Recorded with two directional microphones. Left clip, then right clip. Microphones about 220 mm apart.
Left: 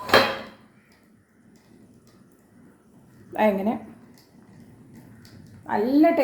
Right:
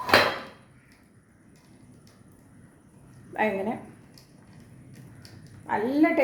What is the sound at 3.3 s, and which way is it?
Speech, 40° left (ahead or behind).